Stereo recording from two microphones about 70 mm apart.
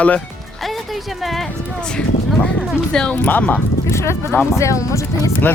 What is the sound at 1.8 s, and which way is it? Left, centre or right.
Speech, centre.